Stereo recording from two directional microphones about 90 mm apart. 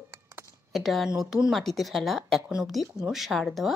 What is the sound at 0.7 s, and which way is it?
Speech, centre (ahead or behind).